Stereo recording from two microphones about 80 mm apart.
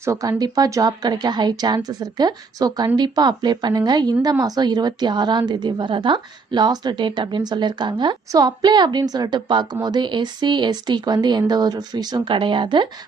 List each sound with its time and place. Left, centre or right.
0.0 s a woman's voice: right
8.3 s a woman's voice: right